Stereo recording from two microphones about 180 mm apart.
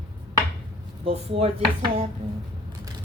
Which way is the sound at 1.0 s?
30° right (ahead or behind).